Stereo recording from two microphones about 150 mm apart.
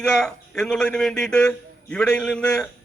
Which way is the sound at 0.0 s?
5° left (ahead or behind).